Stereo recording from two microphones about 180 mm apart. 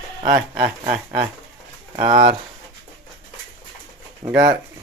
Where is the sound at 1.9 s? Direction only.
25° right (ahead or behind).